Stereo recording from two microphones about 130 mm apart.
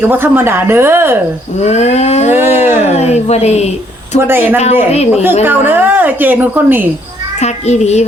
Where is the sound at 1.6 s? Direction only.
60° left (ahead or behind).